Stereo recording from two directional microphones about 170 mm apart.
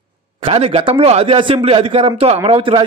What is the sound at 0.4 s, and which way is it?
A man's voice, 35° right (ahead or behind).